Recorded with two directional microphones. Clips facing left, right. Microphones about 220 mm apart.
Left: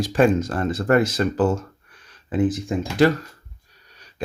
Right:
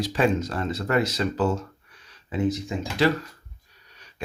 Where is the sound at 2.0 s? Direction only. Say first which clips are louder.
Left 4 dB; 50° left (ahead or behind).